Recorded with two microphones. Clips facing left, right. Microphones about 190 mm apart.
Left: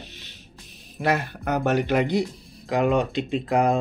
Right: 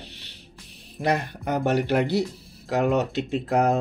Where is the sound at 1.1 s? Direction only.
15° right (ahead or behind).